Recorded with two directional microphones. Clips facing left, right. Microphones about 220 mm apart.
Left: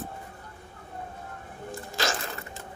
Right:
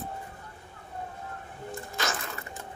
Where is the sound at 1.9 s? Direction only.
30° left (ahead or behind).